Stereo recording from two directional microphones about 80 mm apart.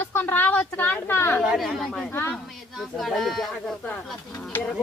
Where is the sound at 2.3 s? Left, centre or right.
Centre.